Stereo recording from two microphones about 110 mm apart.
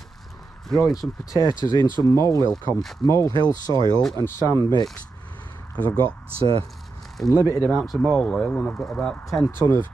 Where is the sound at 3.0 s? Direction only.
25° left (ahead or behind).